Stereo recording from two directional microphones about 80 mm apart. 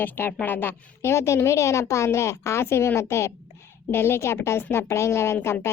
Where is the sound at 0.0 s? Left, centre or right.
Left.